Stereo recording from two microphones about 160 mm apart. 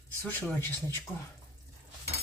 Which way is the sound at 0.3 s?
10° left (ahead or behind).